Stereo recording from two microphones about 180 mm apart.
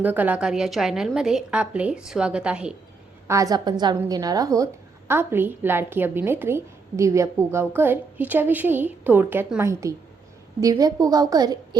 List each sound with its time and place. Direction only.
0.0 s a woman's voice: 10° right (ahead or behind)
3.2 s a woman's voice: 20° right (ahead or behind)